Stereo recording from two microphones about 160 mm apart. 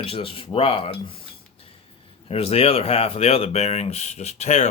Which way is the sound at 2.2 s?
40° left (ahead or behind).